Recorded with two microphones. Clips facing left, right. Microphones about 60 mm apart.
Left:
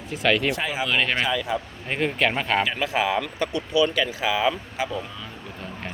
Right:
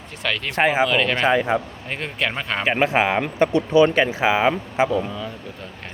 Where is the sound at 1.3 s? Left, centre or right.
Right.